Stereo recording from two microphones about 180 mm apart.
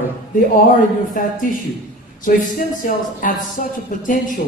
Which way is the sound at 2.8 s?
50° left (ahead or behind).